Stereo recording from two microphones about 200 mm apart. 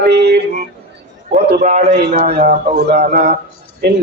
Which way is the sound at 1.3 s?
35° right (ahead or behind).